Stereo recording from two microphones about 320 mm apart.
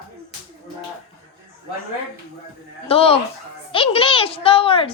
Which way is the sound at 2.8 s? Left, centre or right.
Centre.